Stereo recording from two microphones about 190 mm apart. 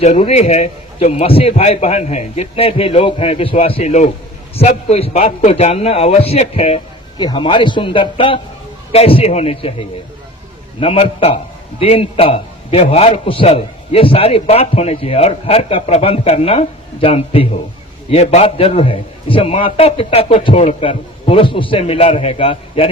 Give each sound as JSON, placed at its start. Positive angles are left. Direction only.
{"t": 0.0, "sound": "a man's voice", "side_deg": 35}
{"t": 10.8, "sound": "a man's voice", "side_deg": 30}